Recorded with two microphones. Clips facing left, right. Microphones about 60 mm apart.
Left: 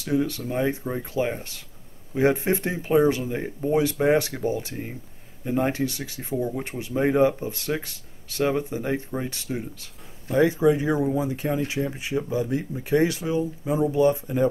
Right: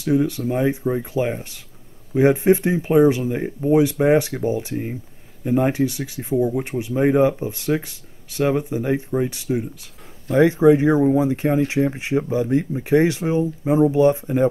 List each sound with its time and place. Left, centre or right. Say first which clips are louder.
0.5 s speech: right 5 dB; centre
1.1 s speech: right 3 dB; centre
3.3 s speech: right 5 dB; centre
3.7 s speech: right 5 dB; centre
5.4 s speech: right 5 dB; centre
10.4 s speech: right 6 dB; right